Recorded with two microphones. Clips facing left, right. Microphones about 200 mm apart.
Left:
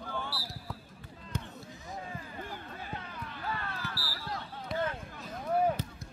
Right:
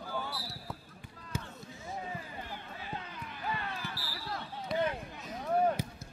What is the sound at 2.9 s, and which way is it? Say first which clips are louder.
Basketball bounce: right 1 dB; 15° right (ahead or behind).